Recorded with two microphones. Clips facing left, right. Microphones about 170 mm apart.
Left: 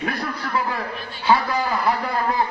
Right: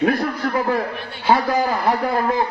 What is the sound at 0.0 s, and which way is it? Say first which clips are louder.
A man's voice: right 8 dB; 50° right (ahead or behind).